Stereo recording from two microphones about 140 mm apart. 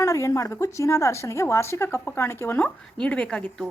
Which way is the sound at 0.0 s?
20° left (ahead or behind).